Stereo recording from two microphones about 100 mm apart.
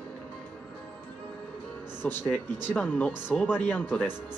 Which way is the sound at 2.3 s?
15° left (ahead or behind).